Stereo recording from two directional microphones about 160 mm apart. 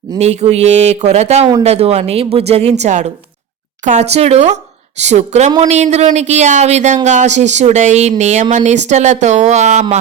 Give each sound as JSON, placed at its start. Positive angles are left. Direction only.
{"t": 0.2, "sound": "speech", "side_deg": -45}